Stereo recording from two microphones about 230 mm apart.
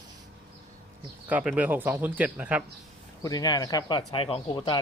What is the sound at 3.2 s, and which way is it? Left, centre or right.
Speech, centre.